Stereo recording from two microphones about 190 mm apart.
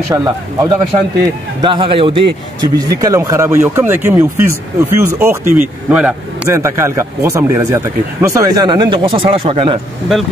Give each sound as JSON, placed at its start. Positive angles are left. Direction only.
{"t": 0.1, "sound": "a man's voice", "side_deg": -20}